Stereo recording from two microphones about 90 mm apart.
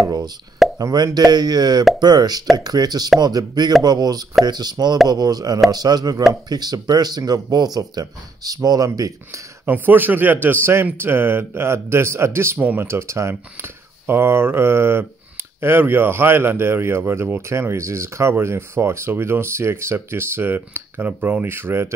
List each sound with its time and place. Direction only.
0.0 s plop: 45° right (ahead or behind)
0.7 s speech: 40° right (ahead or behind)
9.7 s speech: 20° right (ahead or behind)